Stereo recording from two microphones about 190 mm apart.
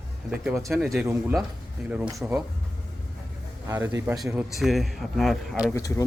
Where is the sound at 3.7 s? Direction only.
15° right (ahead or behind).